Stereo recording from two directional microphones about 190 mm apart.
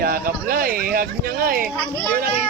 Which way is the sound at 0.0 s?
50° right (ahead or behind).